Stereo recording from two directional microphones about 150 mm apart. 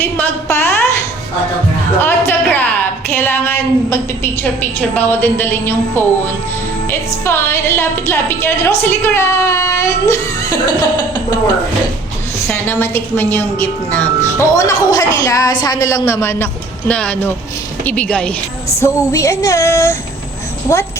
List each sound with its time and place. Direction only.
0.0 s a sound: 15° left (ahead or behind)
2.0 s music: 15° left (ahead or behind)
3.1 s a sound: 15° left (ahead or behind)
4.9 s a woman's voice: 10° left (ahead or behind)
12.5 s a woman's voice: 15° left (ahead or behind)
15.6 s female singing: 25° left (ahead or behind)
16.9 s a woman's voice: 10° left (ahead or behind)
18.8 s female singing: 20° left (ahead or behind)